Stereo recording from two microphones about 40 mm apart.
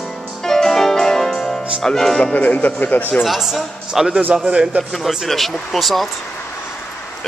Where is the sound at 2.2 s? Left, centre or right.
Left.